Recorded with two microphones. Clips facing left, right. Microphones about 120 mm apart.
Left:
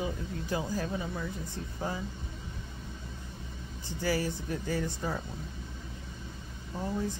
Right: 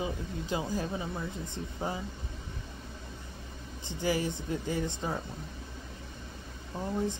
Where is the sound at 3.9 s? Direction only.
20° right (ahead or behind).